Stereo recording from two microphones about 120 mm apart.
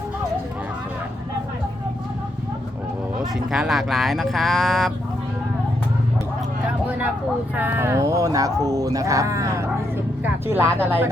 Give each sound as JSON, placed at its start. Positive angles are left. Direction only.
{"t": 3.3, "sound": "speech", "side_deg": -5}
{"t": 7.5, "sound": "speech", "side_deg": -15}